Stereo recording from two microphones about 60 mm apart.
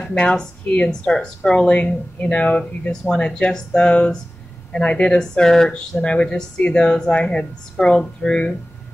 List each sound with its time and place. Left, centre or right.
0.0 s speech: centre